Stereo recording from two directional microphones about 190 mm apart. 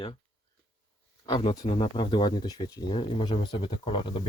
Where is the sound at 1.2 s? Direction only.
25° left (ahead or behind).